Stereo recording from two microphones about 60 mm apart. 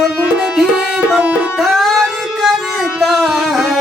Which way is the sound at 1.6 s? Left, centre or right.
Centre.